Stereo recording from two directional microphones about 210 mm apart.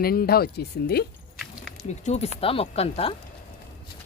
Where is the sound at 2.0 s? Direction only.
30° left (ahead or behind).